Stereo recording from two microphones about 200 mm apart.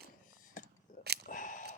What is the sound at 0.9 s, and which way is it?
Camera, 40° left (ahead or behind).